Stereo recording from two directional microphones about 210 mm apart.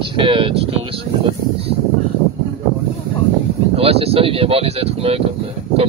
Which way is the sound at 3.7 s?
30° right (ahead or behind).